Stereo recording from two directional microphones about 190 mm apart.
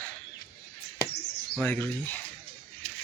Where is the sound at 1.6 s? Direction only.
10° left (ahead or behind).